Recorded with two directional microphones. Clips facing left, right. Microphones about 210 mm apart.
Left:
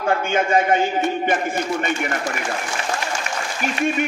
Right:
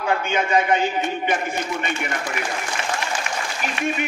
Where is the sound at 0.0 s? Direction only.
45° left (ahead or behind).